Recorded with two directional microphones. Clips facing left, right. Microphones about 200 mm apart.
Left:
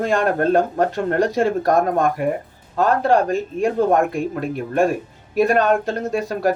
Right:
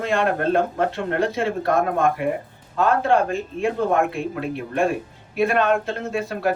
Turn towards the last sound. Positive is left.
turn(degrees=40)  # may be behind; listen again after turning